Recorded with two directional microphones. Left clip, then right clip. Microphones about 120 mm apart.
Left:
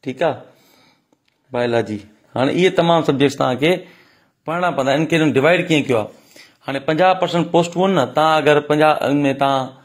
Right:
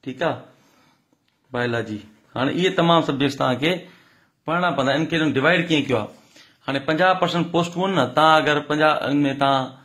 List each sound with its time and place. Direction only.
0.0 s speech: 60° left (ahead or behind)
1.5 s speech: 65° left (ahead or behind)
4.5 s a man's voice: 70° left (ahead or behind); by 8.0 s 40° left (ahead or behind)
8.0 s speech: 55° left (ahead or behind)